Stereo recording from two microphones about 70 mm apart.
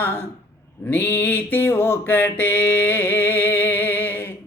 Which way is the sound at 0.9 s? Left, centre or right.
Left.